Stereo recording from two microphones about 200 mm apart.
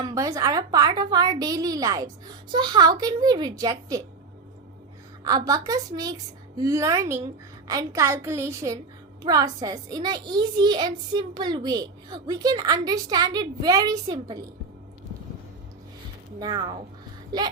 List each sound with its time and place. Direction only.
0.0 s a woman's voice: 15° right (ahead or behind)
5.2 s a woman's voice: 15° right (ahead or behind)
16.4 s a woman's voice: 20° right (ahead or behind)